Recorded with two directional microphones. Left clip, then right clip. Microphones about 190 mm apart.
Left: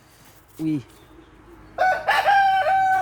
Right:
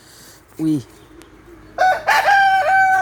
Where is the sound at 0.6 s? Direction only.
15° right (ahead or behind).